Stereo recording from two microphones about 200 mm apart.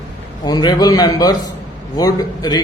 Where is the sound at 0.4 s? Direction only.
20° left (ahead or behind).